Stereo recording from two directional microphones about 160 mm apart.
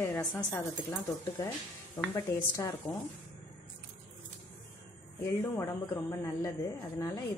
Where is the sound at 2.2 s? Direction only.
20° left (ahead or behind).